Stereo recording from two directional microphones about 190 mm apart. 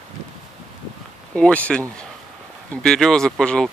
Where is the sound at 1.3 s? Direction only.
5° left (ahead or behind).